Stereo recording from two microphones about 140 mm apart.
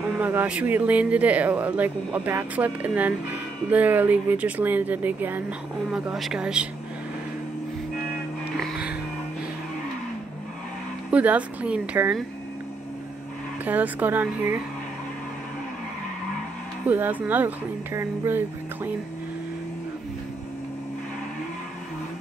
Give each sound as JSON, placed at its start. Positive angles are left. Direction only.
{"t": 0.2, "sound": "speech", "side_deg": -15}
{"t": 8.5, "sound": "music", "side_deg": 0}
{"t": 11.1, "sound": "speech", "side_deg": -10}
{"t": 13.7, "sound": "speech", "side_deg": -10}
{"t": 16.9, "sound": "speech", "side_deg": -10}